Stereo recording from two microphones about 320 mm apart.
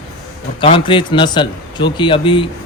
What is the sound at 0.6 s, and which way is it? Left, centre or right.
A man's voice, centre.